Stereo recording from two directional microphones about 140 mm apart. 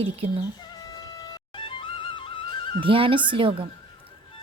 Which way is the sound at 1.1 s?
30° left (ahead or behind).